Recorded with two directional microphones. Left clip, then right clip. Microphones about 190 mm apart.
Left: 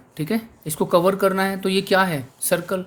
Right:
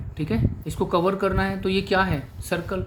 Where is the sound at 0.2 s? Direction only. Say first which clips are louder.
Left 2 dB; 35° left (ahead or behind).